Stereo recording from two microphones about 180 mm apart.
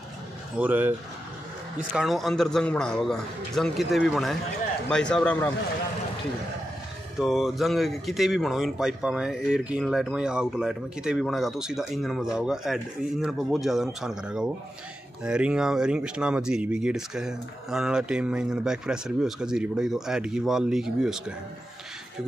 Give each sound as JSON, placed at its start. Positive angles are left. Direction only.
{"t": 0.6, "sound": "speech", "side_deg": -10}
{"t": 7.2, "sound": "speech", "side_deg": 0}